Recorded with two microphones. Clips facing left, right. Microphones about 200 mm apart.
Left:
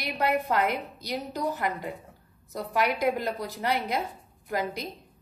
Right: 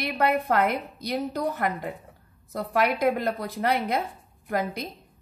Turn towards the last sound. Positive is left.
turn(degrees=-55)  # may be behind; listen again after turning